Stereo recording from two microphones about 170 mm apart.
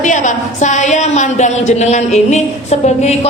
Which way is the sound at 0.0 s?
45° left (ahead or behind).